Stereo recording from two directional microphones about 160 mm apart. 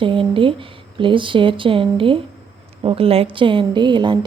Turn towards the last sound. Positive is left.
turn(degrees=-30)  # may be behind; listen again after turning